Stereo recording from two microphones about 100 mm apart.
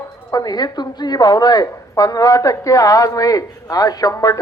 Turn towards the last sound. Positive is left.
turn(degrees=40)  # may be behind; listen again after turning